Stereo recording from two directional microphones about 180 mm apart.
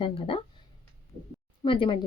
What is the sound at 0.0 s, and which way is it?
Speech, 30° left (ahead or behind).